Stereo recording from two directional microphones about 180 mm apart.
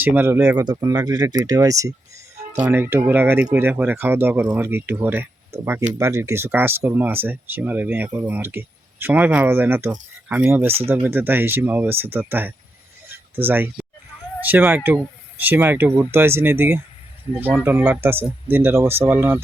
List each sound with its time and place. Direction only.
0.0 s speech: 15° right (ahead or behind)